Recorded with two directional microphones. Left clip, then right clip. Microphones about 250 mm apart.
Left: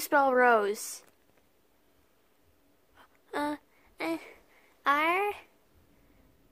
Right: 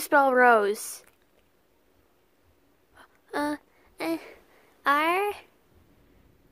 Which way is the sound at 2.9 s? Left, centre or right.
Centre.